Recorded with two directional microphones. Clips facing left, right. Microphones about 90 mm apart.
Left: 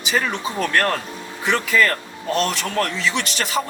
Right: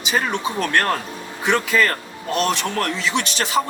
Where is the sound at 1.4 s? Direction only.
20° right (ahead or behind).